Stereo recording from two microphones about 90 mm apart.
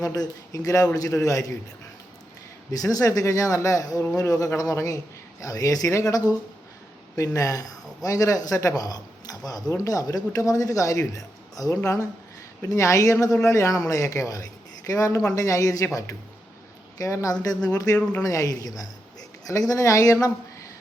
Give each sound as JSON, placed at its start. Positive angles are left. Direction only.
{"t": 0.0, "sound": "speech", "side_deg": 40}
{"t": 2.7, "sound": "speech", "side_deg": 40}
{"t": 7.3, "sound": "speech", "side_deg": 40}
{"t": 17.9, "sound": "speech", "side_deg": 15}
{"t": 18.2, "sound": "speech", "side_deg": 40}